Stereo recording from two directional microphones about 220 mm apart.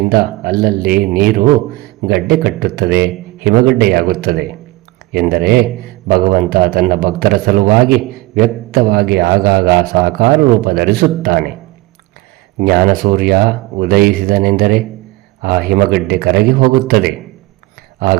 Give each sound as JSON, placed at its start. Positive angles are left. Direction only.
{"t": 0.1, "sound": "a man's voice", "side_deg": -45}
{"t": 12.5, "sound": "a man's voice", "side_deg": -40}